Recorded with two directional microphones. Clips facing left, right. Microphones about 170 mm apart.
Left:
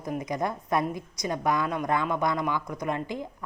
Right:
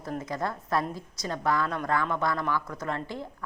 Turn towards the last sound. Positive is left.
turn(degrees=15)  # may be behind; listen again after turning